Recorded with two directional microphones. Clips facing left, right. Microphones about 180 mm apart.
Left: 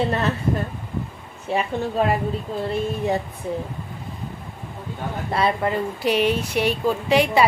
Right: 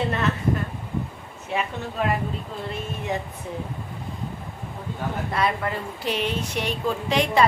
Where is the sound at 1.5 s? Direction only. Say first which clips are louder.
Left 4 dB; 35° left (ahead or behind).